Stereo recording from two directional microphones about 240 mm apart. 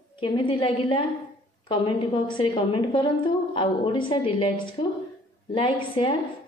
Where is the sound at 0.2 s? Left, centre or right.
Left.